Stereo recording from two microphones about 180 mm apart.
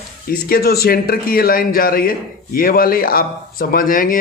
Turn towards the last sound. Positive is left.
turn(degrees=50)  # may be behind; listen again after turning